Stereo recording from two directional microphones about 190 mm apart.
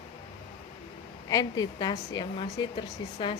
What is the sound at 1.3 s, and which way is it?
A woman's voice, 20° left (ahead or behind).